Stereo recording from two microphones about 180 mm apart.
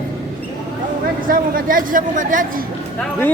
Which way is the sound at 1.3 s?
50° right (ahead or behind).